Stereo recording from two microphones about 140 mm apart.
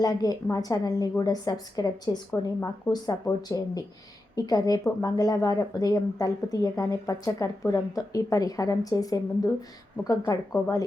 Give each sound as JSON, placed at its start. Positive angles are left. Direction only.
{"t": 0.0, "sound": "a woman's voice", "side_deg": 30}